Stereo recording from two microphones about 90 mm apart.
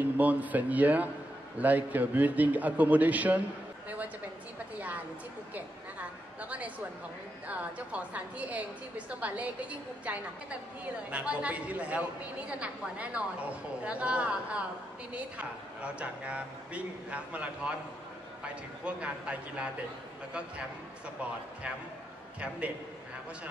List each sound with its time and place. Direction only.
0.0 s a woman's voice: 15° right (ahead or behind)
7.4 s a woman's voice: 15° right (ahead or behind)